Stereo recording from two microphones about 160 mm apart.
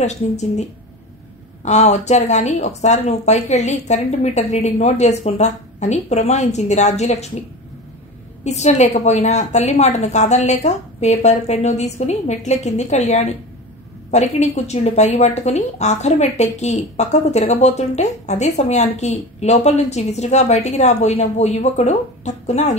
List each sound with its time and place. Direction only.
0.0 s speech: 45° left (ahead or behind)
8.5 s speech: 45° left (ahead or behind)